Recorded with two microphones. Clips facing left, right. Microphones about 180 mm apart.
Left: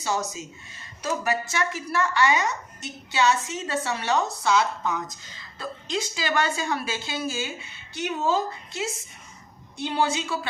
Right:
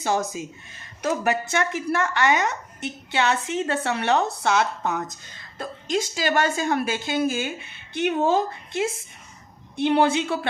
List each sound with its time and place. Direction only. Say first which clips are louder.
0.0 s speech: right 4 dB; 50° right (ahead or behind)